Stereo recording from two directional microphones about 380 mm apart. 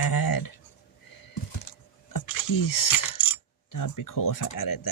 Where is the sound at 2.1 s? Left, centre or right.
Left.